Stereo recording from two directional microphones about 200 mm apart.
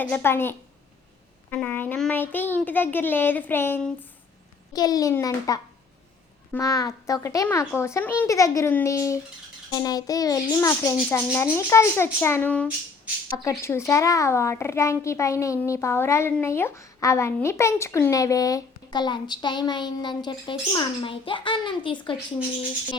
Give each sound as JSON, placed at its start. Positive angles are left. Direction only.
{"t": 0.0, "sound": "a woman's voice", "side_deg": 10}